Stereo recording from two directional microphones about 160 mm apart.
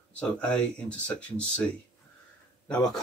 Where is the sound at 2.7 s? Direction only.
5° left (ahead or behind).